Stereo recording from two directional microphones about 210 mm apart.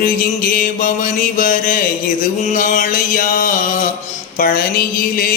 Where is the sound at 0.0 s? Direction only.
40° left (ahead or behind).